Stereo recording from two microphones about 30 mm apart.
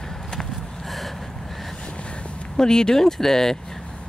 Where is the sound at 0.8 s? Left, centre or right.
Centre.